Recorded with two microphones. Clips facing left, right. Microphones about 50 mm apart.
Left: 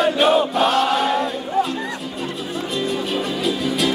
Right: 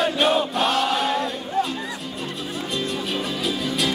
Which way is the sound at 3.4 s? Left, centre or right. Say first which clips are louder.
Left 4 dB; centre.